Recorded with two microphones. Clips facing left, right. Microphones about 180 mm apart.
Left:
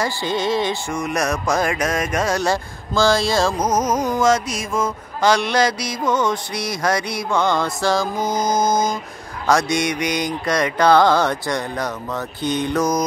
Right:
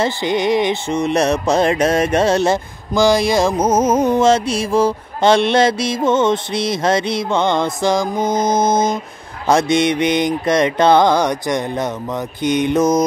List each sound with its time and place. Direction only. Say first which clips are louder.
0.0 s music: right 4 dB; 20° right (ahead or behind)